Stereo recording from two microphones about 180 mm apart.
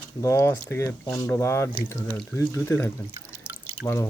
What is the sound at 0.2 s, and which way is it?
Speech, 15° left (ahead or behind).